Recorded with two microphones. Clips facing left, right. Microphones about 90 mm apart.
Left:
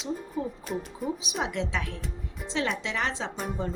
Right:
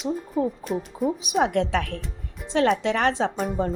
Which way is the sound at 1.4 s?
55° right (ahead or behind).